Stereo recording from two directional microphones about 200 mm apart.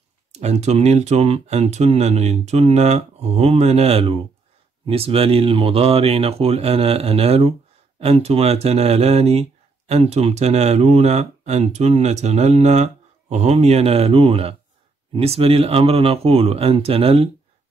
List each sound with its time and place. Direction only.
0.3 s speech: 35° right (ahead or behind)